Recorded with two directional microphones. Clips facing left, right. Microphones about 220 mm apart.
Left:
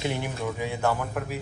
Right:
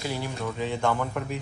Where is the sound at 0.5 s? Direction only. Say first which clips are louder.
Right 2 dB; 10° left (ahead or behind).